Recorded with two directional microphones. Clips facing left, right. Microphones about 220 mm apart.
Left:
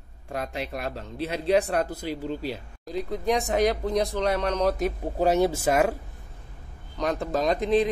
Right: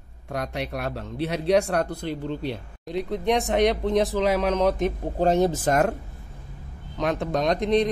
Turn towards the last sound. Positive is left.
turn(degrees=5)  # may be behind; listen again after turning